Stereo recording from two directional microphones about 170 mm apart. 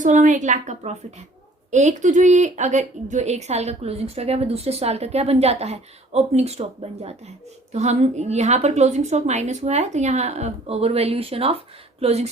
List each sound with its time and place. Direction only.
0.0 s a woman's voice: 45° right (ahead or behind)